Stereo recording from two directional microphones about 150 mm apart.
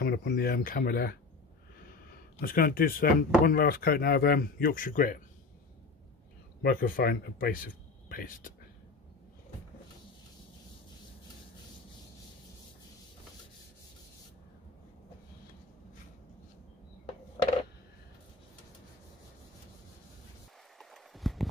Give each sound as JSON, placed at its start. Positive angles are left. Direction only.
{"t": 0.0, "sound": "speech", "side_deg": 90}
{"t": 2.4, "sound": "speech", "side_deg": 75}
{"t": 6.6, "sound": "speech", "side_deg": 75}
{"t": 20.7, "sound": "a sound", "side_deg": 0}